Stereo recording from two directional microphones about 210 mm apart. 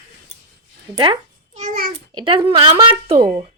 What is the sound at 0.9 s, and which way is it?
A child's voice, 25° right (ahead or behind).